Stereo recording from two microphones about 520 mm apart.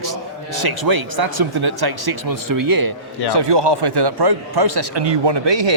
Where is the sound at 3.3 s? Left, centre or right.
Right.